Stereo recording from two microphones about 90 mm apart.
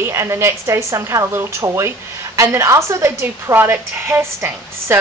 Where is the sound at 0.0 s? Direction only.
30° right (ahead or behind).